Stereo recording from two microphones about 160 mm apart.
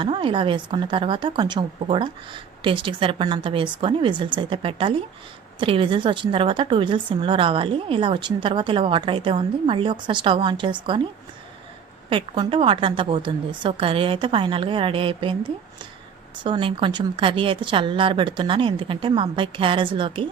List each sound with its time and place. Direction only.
0.0 s a woman's voice: 35° right (ahead or behind)
12.0 s a woman's voice: 35° right (ahead or behind)
16.4 s a woman's voice: 30° right (ahead or behind)